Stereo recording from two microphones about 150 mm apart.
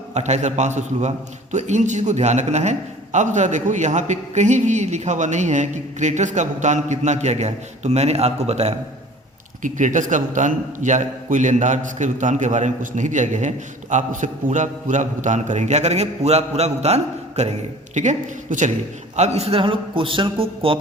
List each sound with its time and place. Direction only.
0.1 s a man's voice: 50° right (ahead or behind)
9.6 s a man's voice: 55° right (ahead or behind); by 20.7 s 40° right (ahead or behind)